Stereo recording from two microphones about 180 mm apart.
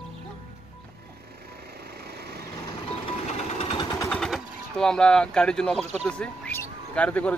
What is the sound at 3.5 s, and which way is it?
Vehicle, 35° left (ahead or behind).